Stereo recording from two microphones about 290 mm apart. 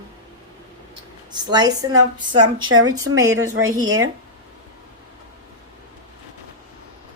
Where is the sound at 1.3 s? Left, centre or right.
Centre.